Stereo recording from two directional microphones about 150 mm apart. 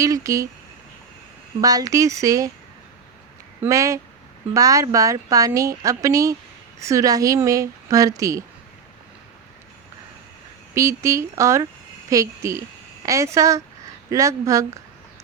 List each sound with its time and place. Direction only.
0.0 s speech: 20° right (ahead or behind)
1.6 s speech: 25° right (ahead or behind)
3.6 s speech: 20° right (ahead or behind)
10.8 s speech: 20° right (ahead or behind)